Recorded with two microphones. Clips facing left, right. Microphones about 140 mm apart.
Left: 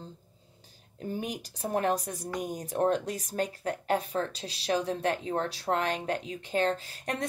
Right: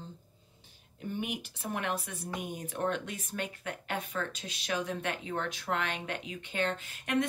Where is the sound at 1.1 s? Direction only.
40° left (ahead or behind).